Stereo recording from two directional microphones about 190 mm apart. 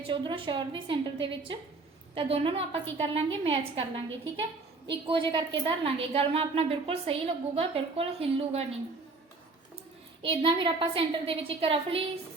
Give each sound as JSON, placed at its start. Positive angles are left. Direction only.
{"t": 0.1, "sound": "a woman's voice", "side_deg": -25}
{"t": 10.2, "sound": "a woman's voice", "side_deg": -25}